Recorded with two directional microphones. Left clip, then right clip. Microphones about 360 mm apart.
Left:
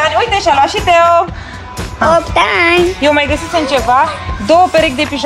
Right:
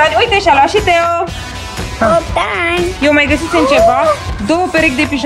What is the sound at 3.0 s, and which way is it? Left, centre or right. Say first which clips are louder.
Speech: right 1 dB; centre.